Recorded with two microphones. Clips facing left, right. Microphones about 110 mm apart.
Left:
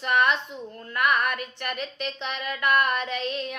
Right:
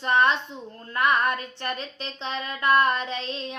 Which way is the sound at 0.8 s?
30° right (ahead or behind).